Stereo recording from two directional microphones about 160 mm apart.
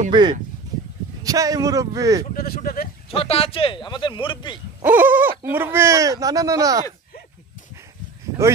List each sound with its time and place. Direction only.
0.1 s speech: 25° right (ahead or behind)
2.3 s speech: 70° left (ahead or behind)
3.1 s a man's voice: 35° left (ahead or behind)
4.8 s owl: 10° right (ahead or behind)
5.4 s speech: 15° right (ahead or behind)